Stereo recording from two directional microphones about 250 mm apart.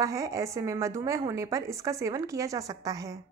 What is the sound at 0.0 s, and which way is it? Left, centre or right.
A woman's voice, centre.